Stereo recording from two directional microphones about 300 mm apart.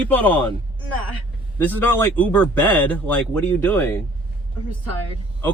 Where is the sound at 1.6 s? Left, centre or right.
Centre.